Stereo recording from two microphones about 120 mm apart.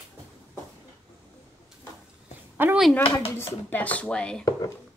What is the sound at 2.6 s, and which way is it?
Speech, 15° right (ahead or behind).